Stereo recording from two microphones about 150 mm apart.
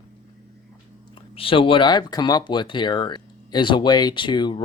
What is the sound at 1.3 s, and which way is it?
Speech, 35° left (ahead or behind).